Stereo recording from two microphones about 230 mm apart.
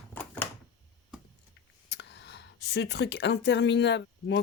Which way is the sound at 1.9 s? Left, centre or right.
Left.